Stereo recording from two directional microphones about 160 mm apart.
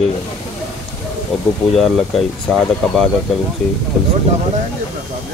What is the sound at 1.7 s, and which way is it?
Speech, centre (ahead or behind).